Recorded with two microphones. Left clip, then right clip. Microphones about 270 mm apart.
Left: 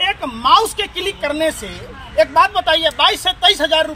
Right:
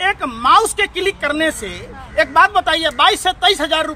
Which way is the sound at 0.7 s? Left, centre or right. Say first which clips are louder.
Right 4 dB; centre.